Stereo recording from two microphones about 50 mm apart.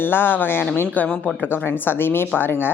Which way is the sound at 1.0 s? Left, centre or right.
Left.